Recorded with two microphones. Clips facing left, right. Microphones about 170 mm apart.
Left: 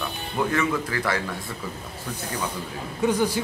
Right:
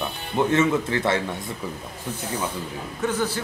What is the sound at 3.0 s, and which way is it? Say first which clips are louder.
Speech: left 3 dB; 15° left (ahead or behind).